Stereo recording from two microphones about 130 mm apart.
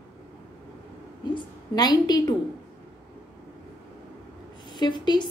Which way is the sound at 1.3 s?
30° left (ahead or behind).